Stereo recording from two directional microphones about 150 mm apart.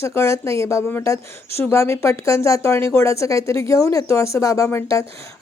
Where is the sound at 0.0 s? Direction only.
20° left (ahead or behind).